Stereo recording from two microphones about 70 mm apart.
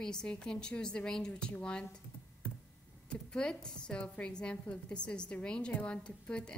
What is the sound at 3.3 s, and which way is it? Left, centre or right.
A woman's voice, centre.